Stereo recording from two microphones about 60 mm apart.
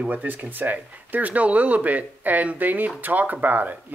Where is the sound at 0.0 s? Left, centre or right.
Right.